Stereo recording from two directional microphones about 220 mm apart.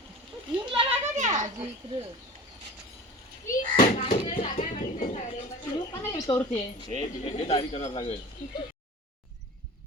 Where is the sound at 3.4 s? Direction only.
35° left (ahead or behind).